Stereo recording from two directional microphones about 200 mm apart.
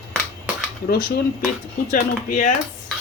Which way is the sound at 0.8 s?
50° left (ahead or behind).